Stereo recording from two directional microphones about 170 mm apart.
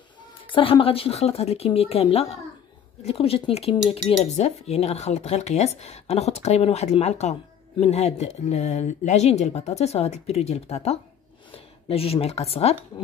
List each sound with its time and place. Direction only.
0.5 s speech: 30° left (ahead or behind)